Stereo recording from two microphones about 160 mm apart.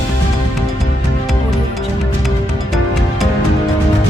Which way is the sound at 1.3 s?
Centre (ahead or behind).